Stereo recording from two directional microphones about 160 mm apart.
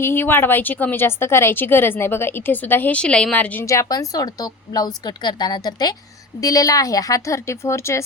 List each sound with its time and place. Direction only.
0.0 s a woman's voice: 15° left (ahead or behind)